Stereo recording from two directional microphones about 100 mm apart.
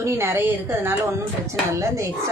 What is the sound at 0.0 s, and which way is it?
Speech, 25° right (ahead or behind).